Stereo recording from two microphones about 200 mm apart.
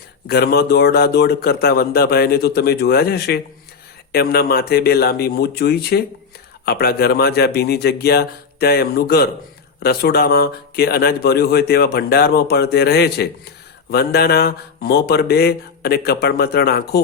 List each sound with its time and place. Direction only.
0.3 s speech: 50° left (ahead or behind)